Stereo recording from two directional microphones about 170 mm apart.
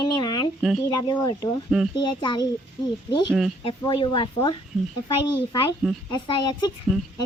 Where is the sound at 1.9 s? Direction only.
25° left (ahead or behind).